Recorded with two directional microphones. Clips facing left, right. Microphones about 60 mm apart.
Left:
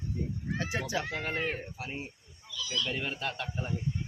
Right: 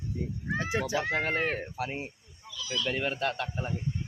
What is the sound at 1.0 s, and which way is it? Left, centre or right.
Speech, right.